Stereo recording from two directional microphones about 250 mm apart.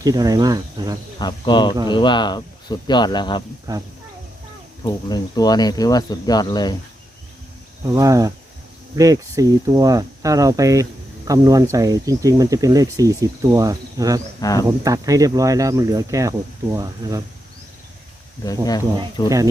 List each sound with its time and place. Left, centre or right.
0.0 s speech: centre
1.2 s speech: centre
3.7 s speech: centre
4.8 s speech: centre
7.9 s speech: centre
14.4 s speech: centre
14.8 s speech: centre
18.4 s speech: centre